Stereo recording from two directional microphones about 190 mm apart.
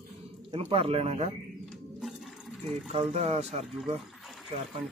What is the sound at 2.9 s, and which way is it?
Speech, 35° right (ahead or behind).